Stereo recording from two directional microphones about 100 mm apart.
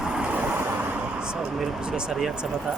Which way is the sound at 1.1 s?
10° right (ahead or behind).